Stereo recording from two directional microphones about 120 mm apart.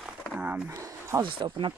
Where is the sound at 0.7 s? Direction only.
25° right (ahead or behind).